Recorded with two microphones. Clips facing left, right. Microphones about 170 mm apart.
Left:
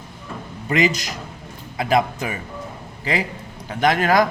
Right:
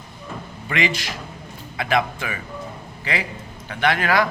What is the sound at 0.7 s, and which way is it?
A man's voice, 40° left (ahead or behind).